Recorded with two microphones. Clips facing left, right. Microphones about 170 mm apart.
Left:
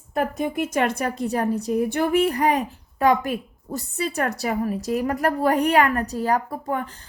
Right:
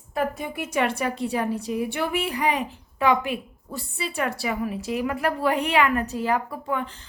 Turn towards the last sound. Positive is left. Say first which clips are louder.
# left 1 dB
turn(degrees=40)  # may be behind; listen again after turning